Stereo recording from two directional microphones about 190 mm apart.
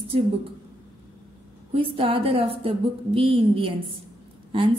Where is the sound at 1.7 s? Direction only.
25° right (ahead or behind).